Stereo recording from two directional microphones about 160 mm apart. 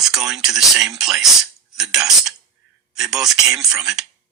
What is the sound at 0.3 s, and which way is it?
Speech, 5° right (ahead or behind).